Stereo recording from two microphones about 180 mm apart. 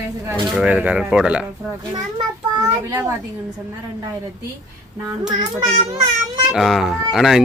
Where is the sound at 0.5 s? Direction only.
5° right (ahead or behind).